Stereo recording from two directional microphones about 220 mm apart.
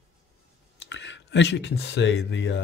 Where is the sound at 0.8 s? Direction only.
55° left (ahead or behind).